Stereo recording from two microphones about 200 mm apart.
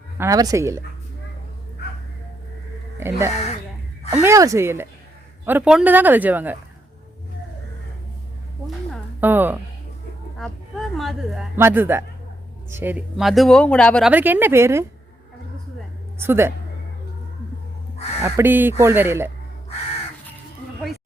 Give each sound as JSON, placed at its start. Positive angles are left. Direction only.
{"t": 0.2, "sound": "speech", "side_deg": -20}
{"t": 3.0, "sound": "speech", "side_deg": -15}
{"t": 9.2, "sound": "speech", "side_deg": -10}
{"t": 10.3, "sound": "a man's voice", "side_deg": 0}
{"t": 14.1, "sound": "speech", "side_deg": -10}
{"t": 16.2, "sound": "speech", "side_deg": -10}
{"t": 18.2, "sound": "speech", "side_deg": -10}